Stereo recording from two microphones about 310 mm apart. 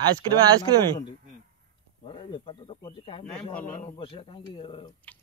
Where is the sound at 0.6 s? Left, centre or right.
Centre.